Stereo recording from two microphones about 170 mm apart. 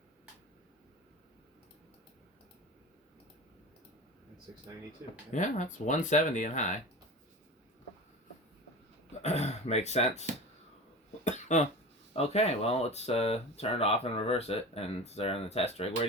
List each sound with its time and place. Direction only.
5.3 s speech: 45° left (ahead or behind)
9.2 s speech: 40° left (ahead or behind)
11.2 s a sound: 45° left (ahead or behind)
12.1 s speech: 40° left (ahead or behind)